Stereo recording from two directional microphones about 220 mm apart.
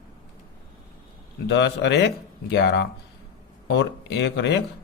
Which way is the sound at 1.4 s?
50° left (ahead or behind).